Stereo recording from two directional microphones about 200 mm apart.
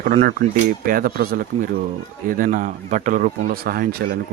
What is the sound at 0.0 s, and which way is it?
Speech, 40° right (ahead or behind).